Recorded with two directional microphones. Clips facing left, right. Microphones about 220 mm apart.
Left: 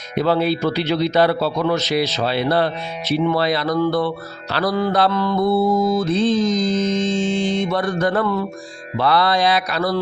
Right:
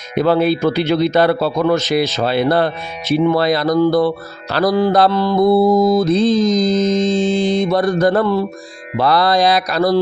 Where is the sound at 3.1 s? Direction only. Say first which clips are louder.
Right 4 dB; 45° right (ahead or behind).